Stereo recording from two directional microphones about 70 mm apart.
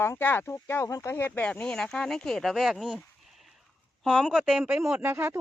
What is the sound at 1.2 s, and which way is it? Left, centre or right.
Speech, left.